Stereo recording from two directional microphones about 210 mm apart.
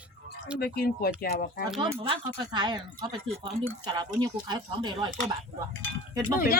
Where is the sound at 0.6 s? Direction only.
45° left (ahead or behind).